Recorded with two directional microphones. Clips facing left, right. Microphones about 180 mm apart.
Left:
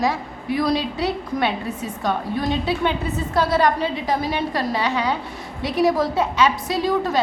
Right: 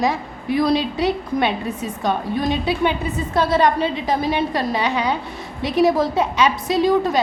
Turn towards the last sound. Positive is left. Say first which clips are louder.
# right 3 dB
turn(degrees=-20)  # may be behind; listen again after turning